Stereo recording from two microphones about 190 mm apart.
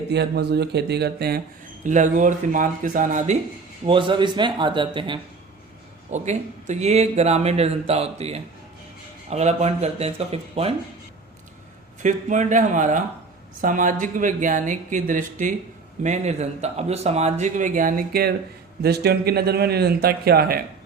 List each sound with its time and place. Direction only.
0.1 s a man's voice: 60° right (ahead or behind)
1.8 s a man's voice: 40° right (ahead or behind)
3.8 s speech: 25° right (ahead or behind)
6.1 s a man's voice: 40° right (ahead or behind)
12.0 s a man's voice: 40° right (ahead or behind)